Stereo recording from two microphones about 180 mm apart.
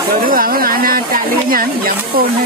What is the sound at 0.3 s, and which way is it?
Speech, 55° right (ahead or behind).